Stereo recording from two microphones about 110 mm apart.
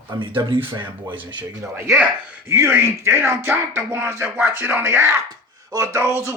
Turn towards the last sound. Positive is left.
turn(degrees=-25)  # may be behind; listen again after turning